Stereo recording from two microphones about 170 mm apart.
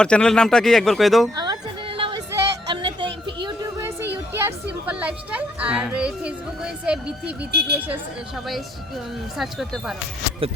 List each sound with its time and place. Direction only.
0.0 s speech: 5° left (ahead or behind)
1.4 s music: 30° right (ahead or behind)
3.1 s a sound: 90° right
3.4 s a sound: 20° right (ahead or behind)
4.9 s a woman's voice: 10° right (ahead or behind)
9.4 s speech: centre (ahead or behind)
10.4 s speech: 35° right (ahead or behind)